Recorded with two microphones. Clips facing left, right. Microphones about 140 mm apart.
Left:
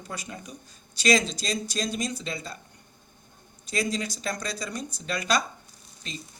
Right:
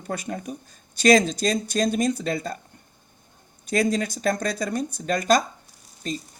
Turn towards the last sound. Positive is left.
turn(degrees=-45)  # may be behind; listen again after turning